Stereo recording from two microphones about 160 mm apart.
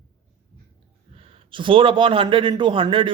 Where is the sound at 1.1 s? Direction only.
35° right (ahead or behind).